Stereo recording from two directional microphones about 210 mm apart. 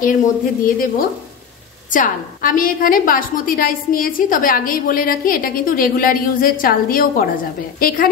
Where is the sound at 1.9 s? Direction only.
40° left (ahead or behind).